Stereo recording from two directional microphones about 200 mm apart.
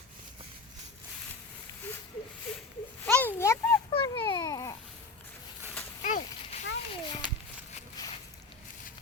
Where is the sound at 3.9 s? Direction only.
25° left (ahead or behind).